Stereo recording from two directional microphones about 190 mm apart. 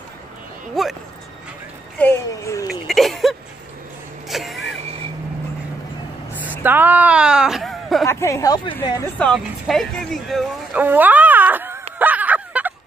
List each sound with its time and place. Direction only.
0.8 s speech: centre (ahead or behind)
2.0 s speech: 10° left (ahead or behind)
2.9 s a sound: centre (ahead or behind)
4.3 s vehicle: centre (ahead or behind)
6.6 s speech: 10° right (ahead or behind)
8.1 s speech: 15° left (ahead or behind)
9.2 s speech: centre (ahead or behind)
12.0 s a sound: 10° right (ahead or behind)